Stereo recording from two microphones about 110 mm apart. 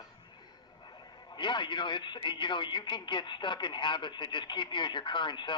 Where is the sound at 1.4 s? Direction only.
45° left (ahead or behind).